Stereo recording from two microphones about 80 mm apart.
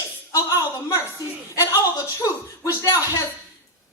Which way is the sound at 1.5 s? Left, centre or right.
Left.